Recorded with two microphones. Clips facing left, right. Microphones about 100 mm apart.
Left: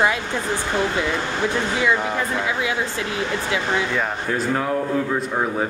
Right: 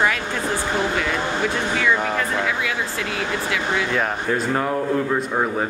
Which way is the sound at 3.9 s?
Centre (ahead or behind).